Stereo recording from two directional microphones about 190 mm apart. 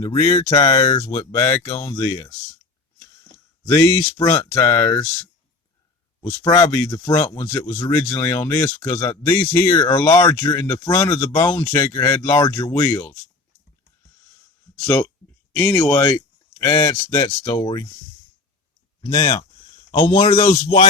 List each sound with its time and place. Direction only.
0.0 s speech: 20° left (ahead or behind)
3.8 s speech: 20° left (ahead or behind)
6.1 s speech: 20° left (ahead or behind)
14.8 s speech: 15° left (ahead or behind)
19.0 s speech: 25° left (ahead or behind)